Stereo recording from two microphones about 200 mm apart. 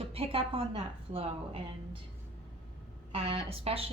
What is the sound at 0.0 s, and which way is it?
A woman's voice, 30° right (ahead or behind).